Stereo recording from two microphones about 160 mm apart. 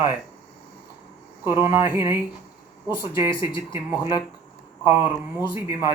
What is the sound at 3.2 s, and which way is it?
Speech, 30° left (ahead or behind).